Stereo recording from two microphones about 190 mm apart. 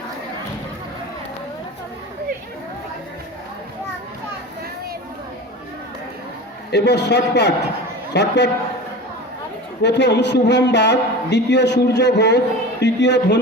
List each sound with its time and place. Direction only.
6.7 s a man's voice: 65° left (ahead or behind)
9.8 s a man's voice: 65° left (ahead or behind)